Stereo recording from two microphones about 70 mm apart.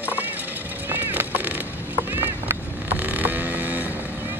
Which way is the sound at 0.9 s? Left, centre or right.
Right.